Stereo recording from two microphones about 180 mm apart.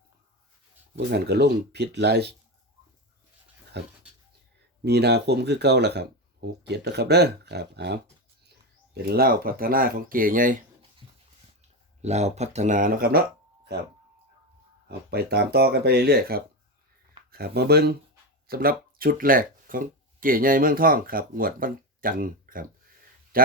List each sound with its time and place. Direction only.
0.9 s speech: 65° right (ahead or behind)
3.7 s speech: 70° right (ahead or behind); by 10.6 s 50° right (ahead or behind)
12.0 s speech: 40° right (ahead or behind); by 13.2 s 55° right (ahead or behind)
14.8 s speech: 60° right (ahead or behind)
23.3 s a sound: 55° right (ahead or behind)